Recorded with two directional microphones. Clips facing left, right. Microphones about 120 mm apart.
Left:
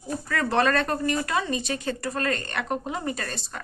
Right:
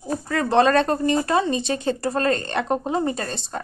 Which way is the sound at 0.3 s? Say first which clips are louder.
Right 5 dB; 25° right (ahead or behind).